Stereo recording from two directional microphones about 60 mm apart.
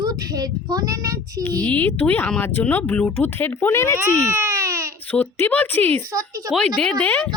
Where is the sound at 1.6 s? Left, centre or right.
Left.